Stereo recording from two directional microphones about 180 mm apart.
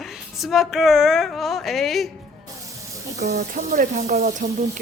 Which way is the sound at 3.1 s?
40° right (ahead or behind).